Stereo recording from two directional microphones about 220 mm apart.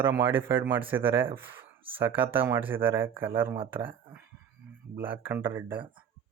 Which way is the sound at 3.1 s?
25° right (ahead or behind).